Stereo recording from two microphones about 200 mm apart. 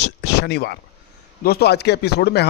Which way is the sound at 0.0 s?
55° left (ahead or behind).